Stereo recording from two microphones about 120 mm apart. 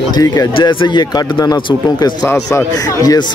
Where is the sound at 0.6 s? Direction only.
45° left (ahead or behind).